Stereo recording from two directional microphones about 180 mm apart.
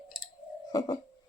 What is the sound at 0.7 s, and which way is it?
Bird, 20° left (ahead or behind).